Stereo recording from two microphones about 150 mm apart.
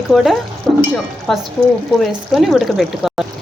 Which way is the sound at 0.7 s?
20° right (ahead or behind).